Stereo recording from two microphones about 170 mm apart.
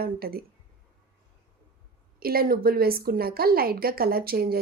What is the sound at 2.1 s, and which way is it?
A woman's voice, 60° right (ahead or behind).